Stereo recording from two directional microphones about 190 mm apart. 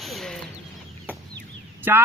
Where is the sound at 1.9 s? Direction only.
10° right (ahead or behind).